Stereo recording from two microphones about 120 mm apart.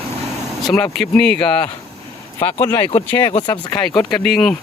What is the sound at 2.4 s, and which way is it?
Speech, 20° left (ahead or behind).